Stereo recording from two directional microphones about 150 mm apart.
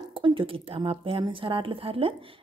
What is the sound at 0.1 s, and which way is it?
Speech, 35° right (ahead or behind).